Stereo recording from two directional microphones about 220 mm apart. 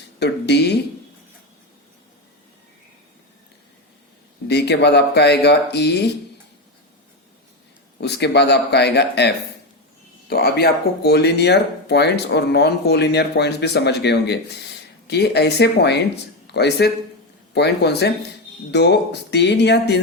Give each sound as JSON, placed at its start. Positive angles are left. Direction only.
{"t": 0.2, "sound": "speech", "side_deg": 50}
{"t": 4.4, "sound": "speech", "side_deg": 50}
{"t": 8.0, "sound": "speech", "side_deg": 50}